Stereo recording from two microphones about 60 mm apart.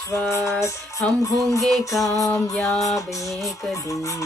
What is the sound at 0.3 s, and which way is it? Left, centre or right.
Music, left.